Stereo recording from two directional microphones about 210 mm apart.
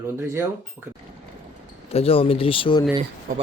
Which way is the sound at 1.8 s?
30° left (ahead or behind).